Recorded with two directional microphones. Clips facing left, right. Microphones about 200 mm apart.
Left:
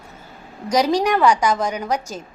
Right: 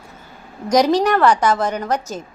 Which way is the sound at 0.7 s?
10° left (ahead or behind).